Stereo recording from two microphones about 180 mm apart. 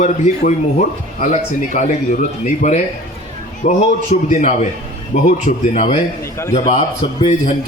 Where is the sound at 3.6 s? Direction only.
40° left (ahead or behind).